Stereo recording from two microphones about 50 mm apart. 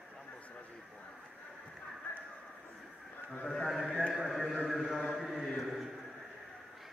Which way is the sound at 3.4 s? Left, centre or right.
Centre.